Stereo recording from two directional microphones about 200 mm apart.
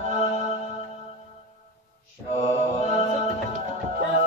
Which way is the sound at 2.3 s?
35° left (ahead or behind).